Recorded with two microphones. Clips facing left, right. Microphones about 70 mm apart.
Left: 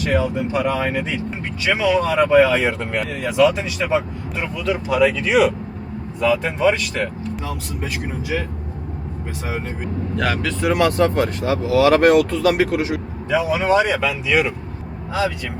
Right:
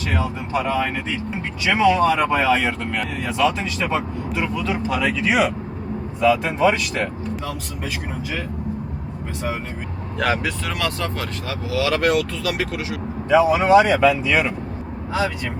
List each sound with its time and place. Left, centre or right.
0.1 s speech: centre
1.6 s speech: centre
10.6 s speech: left
13.3 s speech: centre